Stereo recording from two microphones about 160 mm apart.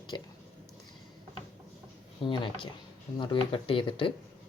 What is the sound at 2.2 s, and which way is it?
Speech, 30° left (ahead or behind).